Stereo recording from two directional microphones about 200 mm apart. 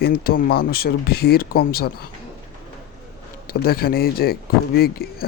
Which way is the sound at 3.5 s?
50° left (ahead or behind).